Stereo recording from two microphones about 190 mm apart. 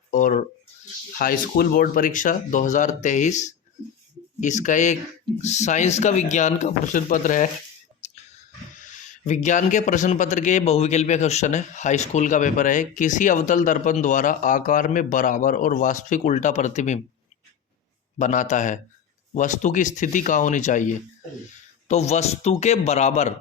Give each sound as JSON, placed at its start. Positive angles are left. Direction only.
{"t": 0.1, "sound": "speech", "side_deg": 45}
{"t": 8.0, "sound": "whispering", "side_deg": 35}
{"t": 9.0, "sound": "speech", "side_deg": 40}
{"t": 18.2, "sound": "speech", "side_deg": 40}